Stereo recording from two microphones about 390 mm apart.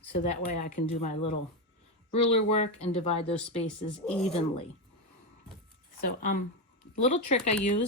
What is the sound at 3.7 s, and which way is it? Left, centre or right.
Speech, centre.